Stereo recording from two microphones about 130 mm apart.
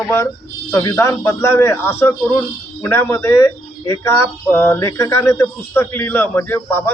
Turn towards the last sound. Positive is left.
turn(degrees=15)  # may be behind; listen again after turning